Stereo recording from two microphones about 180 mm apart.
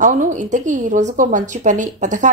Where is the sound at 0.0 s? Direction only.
45° right (ahead or behind).